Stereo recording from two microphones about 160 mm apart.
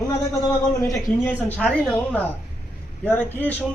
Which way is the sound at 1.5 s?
5° left (ahead or behind).